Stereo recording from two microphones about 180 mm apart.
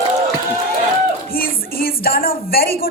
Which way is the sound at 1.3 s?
55° left (ahead or behind).